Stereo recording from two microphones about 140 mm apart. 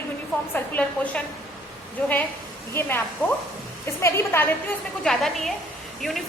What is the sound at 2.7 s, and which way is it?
A woman's voice, 15° left (ahead or behind).